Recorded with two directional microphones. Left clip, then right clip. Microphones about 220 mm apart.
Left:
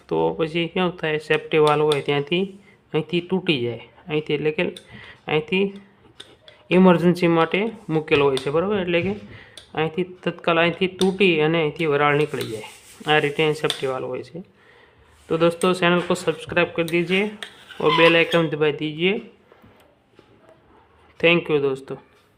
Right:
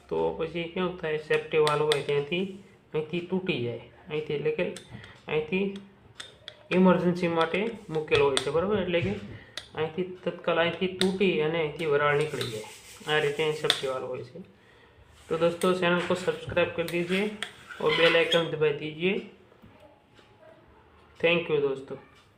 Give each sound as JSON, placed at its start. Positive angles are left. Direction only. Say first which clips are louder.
{"t": 0.1, "sound": "speech", "louder": "left 7 dB", "side_deg": 50}
{"t": 6.7, "sound": "speech", "louder": "left 7 dB", "side_deg": 50}
{"t": 15.3, "sound": "speech", "louder": "left 6 dB", "side_deg": 50}
{"t": 21.2, "sound": "speech", "louder": "left 6 dB", "side_deg": 50}